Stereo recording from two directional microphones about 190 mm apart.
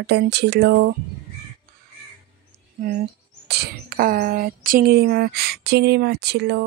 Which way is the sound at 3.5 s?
55° right (ahead or behind).